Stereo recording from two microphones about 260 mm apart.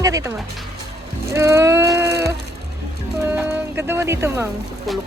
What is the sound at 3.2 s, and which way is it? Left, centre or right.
Music, centre.